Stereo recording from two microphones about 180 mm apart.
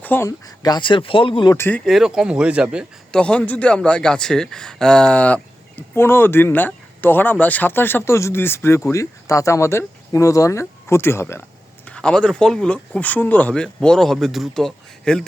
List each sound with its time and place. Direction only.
0.0 s speech: 10° left (ahead or behind); by 1.5 s 30° left (ahead or behind)
1.5 s speech: 15° left (ahead or behind)
1.8 s speech: centre (ahead or behind)
3.2 s speech: 5° left (ahead or behind)